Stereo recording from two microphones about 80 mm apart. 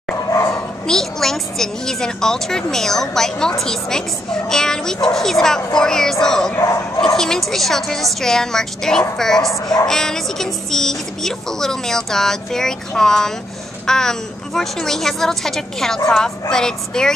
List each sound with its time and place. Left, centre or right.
0.3 s dog: left
0.8 s a woman's voice: centre